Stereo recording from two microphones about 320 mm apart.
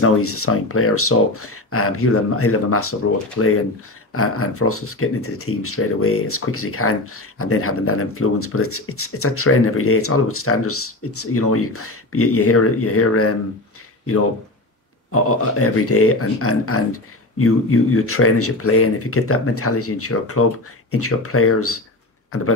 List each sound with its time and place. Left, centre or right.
0.0 s speech: left
15.0 s speech: left